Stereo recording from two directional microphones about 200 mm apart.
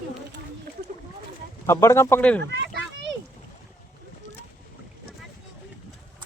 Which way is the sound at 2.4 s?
60° right (ahead or behind).